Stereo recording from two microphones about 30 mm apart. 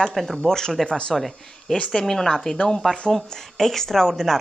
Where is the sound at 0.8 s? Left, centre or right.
Left.